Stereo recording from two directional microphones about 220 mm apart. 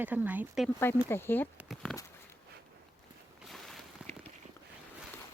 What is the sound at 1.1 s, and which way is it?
Speech, 10° left (ahead or behind).